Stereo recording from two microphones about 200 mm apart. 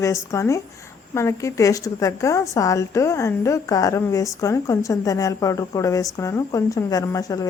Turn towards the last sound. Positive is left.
turn(degrees=15)  # may be behind; listen again after turning